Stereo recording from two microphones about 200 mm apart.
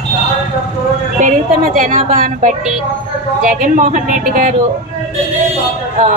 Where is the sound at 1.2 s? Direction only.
40° right (ahead or behind).